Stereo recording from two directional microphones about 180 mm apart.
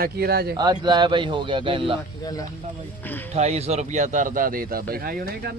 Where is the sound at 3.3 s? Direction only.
35° right (ahead or behind); by 5.5 s 55° right (ahead or behind).